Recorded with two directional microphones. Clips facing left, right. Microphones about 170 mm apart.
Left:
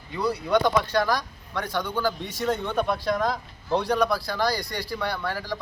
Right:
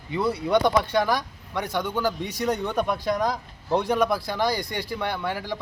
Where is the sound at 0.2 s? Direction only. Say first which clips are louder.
Right 1 dB; 25° right (ahead or behind).